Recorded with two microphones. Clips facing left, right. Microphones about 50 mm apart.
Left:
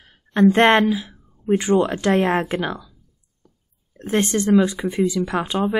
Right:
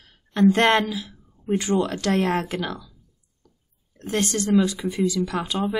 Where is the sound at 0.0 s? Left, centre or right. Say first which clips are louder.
Left 3 dB; left.